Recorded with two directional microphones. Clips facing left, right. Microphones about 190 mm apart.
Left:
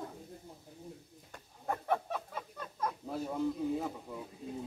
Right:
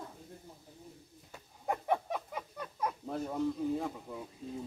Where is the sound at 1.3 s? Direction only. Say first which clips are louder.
Right 2 dB; 15° right (ahead or behind).